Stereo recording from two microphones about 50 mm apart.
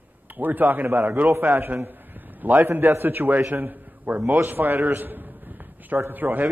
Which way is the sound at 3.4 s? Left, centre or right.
Right.